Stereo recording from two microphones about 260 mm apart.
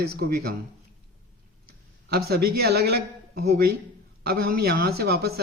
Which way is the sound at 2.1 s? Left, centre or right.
Right.